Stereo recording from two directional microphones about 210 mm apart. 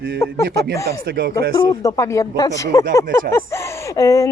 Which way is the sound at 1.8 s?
15° left (ahead or behind).